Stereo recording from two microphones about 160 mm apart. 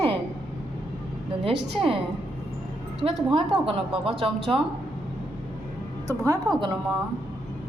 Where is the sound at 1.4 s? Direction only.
35° right (ahead or behind).